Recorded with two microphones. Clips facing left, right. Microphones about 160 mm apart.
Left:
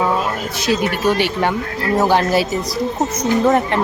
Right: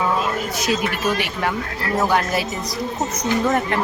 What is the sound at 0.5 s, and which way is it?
Speech, 30° left (ahead or behind).